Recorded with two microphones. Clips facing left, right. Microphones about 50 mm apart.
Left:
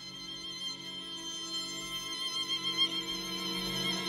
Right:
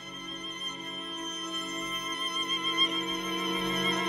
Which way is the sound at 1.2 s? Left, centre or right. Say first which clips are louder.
Right 6 dB; right.